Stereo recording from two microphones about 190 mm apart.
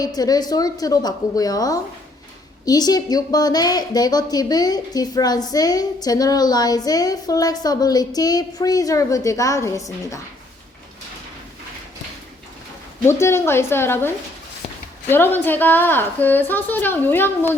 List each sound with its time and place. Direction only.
0.0 s a woman's voice: 20° left (ahead or behind)
13.1 s a woman's voice: 15° left (ahead or behind)
15.1 s a woman's voice: 10° left (ahead or behind)